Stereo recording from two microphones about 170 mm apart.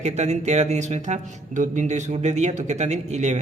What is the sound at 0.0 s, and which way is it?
A man's voice, 40° right (ahead or behind).